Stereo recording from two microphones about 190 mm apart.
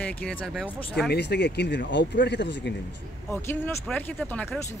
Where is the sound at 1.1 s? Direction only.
60° left (ahead or behind).